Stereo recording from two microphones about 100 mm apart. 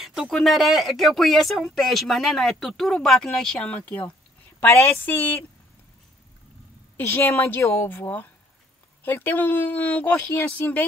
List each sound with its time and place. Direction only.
0.0 s speech: centre (ahead or behind); by 4.1 s 15° left (ahead or behind)
4.6 s speech: 25° left (ahead or behind)
7.0 s speech: 25° left (ahead or behind)